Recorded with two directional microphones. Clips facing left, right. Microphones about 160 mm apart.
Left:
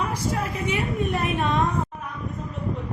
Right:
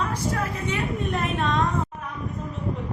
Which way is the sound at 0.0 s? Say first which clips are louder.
Even; 10° left (ahead or behind).